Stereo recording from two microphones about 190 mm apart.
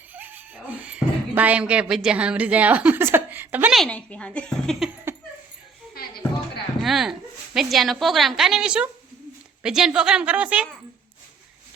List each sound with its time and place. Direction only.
0.1 s a woman's voice: 10° right (ahead or behind)
5.1 s a sound: 15° right (ahead or behind)
6.8 s a woman's voice: centre (ahead or behind)